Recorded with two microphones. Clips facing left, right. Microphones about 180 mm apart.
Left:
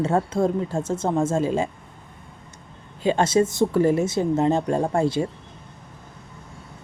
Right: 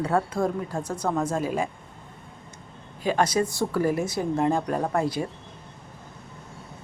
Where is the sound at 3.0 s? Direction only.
25° left (ahead or behind).